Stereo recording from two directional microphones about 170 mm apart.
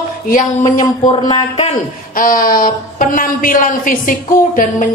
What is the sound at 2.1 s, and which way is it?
A woman's voice, 55° left (ahead or behind).